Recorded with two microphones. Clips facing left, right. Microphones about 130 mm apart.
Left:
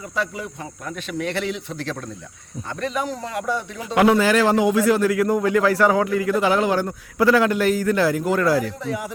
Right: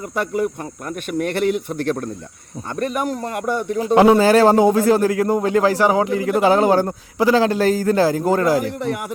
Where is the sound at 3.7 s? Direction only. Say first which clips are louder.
Right 5 dB; 35° right (ahead or behind).